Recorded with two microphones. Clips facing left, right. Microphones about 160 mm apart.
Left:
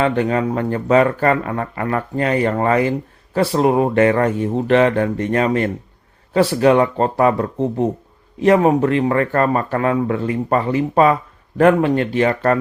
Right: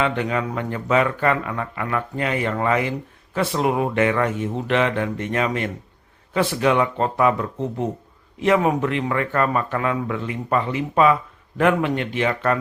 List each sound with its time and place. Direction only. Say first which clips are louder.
0.0 s speech: left 5 dB; 40° left (ahead or behind)